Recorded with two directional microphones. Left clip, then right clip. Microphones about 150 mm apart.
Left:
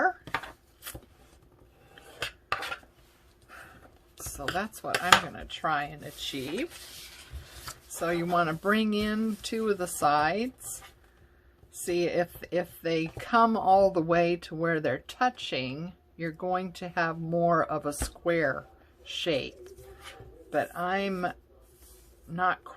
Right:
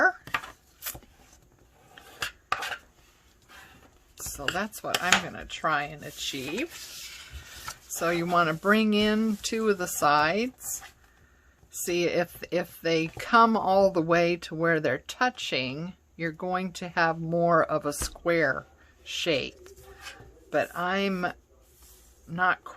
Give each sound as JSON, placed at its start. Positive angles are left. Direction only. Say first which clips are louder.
{"t": 4.5, "sound": "speech", "louder": "left 1 dB", "side_deg": -25}
{"t": 7.7, "sound": "speech", "louder": "right 3 dB", "side_deg": -30}
{"t": 11.9, "sound": "speech", "louder": "right 1 dB", "side_deg": -30}